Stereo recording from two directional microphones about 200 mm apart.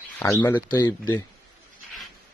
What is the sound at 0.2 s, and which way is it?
Speech, 10° left (ahead or behind).